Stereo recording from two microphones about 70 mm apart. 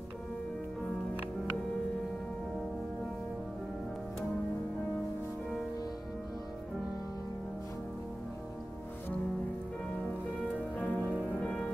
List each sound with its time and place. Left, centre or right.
10.8 s music: left
11.4 s music: centre